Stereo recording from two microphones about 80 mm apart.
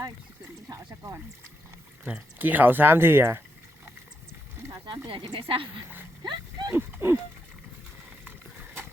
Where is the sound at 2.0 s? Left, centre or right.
Centre.